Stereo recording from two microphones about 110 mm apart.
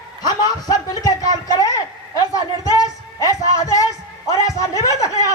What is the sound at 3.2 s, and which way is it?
Music, 30° left (ahead or behind).